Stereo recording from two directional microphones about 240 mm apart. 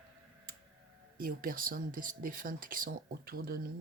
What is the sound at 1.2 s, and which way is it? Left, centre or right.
Speech, right.